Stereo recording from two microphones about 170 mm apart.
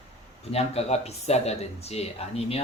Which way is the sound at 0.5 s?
40° left (ahead or behind).